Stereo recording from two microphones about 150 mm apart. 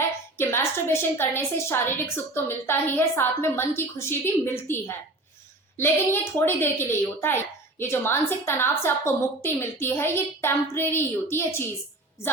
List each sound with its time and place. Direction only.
0.3 s a woman's voice: 15° left (ahead or behind)